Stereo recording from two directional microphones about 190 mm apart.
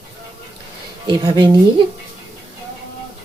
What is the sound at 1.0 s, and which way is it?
Speech, 25° right (ahead or behind).